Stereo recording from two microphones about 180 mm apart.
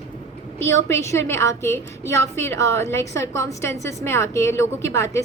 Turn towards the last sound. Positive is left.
turn(degrees=15)  # may be behind; listen again after turning